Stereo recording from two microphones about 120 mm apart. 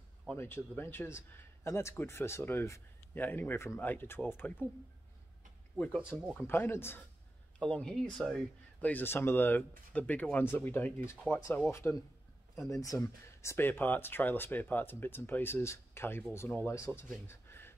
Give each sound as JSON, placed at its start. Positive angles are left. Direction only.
{"t": 0.4, "sound": "a man's voice", "side_deg": 20}
{"t": 5.8, "sound": "a man's voice", "side_deg": 15}
{"t": 7.5, "sound": "speech", "side_deg": 10}
{"t": 8.8, "sound": "a man's voice", "side_deg": 15}